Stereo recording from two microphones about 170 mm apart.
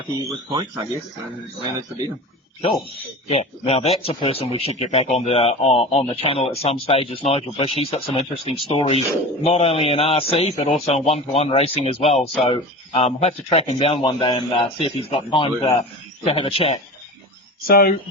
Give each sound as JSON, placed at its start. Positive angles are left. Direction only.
{"t": 2.6, "sound": "a man's voice", "side_deg": 35}
{"t": 17.7, "sound": "speech", "side_deg": 60}